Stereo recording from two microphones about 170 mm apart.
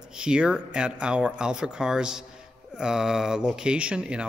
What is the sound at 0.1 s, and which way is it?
Speech, 5° right (ahead or behind).